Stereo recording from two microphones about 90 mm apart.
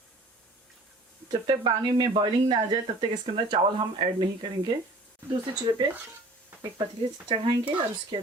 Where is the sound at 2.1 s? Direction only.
90° right.